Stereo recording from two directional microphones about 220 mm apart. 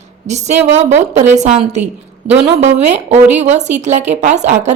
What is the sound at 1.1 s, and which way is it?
A woman's voice, 30° right (ahead or behind).